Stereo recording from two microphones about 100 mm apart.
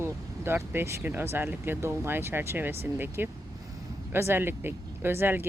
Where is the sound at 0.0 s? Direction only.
25° right (ahead or behind).